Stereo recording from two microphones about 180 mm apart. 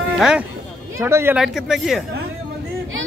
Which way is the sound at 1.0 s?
15° right (ahead or behind).